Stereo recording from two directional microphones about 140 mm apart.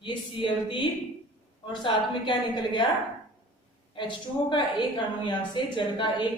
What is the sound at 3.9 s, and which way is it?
A woman's voice, 35° left (ahead or behind).